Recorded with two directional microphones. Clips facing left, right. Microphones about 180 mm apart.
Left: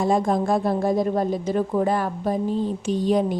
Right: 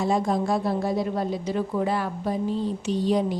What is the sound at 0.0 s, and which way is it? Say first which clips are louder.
A woman's voice: left 3 dB; 50° left (ahead or behind).